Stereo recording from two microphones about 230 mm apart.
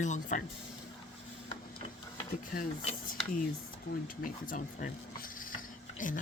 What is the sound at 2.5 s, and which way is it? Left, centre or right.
Speech, left.